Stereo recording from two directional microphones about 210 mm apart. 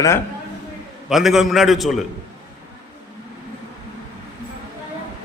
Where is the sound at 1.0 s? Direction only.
Centre (ahead or behind).